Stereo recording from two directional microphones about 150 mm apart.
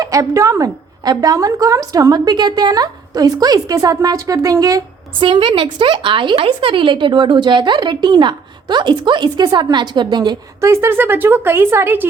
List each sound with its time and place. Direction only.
0.0 s a woman's voice: 20° right (ahead or behind)
5.2 s a woman's voice: 35° right (ahead or behind)
10.7 s speech: 15° right (ahead or behind)